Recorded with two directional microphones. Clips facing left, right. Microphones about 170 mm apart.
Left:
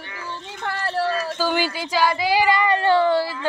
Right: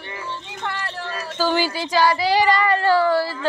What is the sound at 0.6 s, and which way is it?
Run, 40° left (ahead or behind).